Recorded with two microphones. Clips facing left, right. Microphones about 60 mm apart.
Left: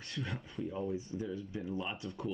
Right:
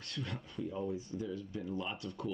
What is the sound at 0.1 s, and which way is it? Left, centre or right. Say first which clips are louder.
Speech: left 1 dB; centre.